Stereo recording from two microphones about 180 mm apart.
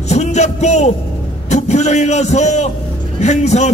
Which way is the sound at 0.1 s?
40° left (ahead or behind).